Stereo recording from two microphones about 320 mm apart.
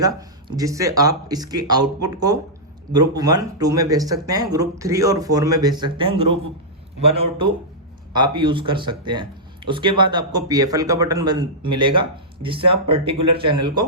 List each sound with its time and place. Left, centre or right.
0.0 s speech: centre